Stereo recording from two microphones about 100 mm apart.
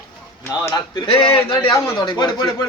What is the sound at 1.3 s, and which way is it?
Speech, 25° left (ahead or behind).